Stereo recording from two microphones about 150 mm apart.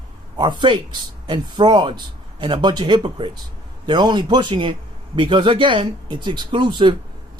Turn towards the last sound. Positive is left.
turn(degrees=-30)  # may be behind; listen again after turning